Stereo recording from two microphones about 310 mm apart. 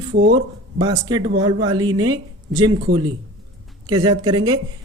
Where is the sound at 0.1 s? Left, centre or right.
Right.